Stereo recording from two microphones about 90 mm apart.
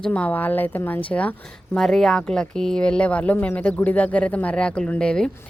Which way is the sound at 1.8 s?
5° left (ahead or behind).